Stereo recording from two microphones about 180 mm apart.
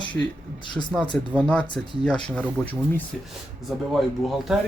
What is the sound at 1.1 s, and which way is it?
Speech, 10° left (ahead or behind).